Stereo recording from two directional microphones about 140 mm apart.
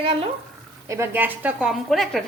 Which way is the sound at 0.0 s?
40° right (ahead or behind).